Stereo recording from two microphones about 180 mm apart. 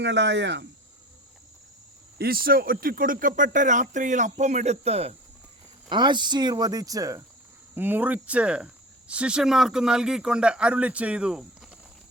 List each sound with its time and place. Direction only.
0.0 s speech: 75° right (ahead or behind)
2.1 s speech: 55° right (ahead or behind); by 11.8 s 5° right (ahead or behind)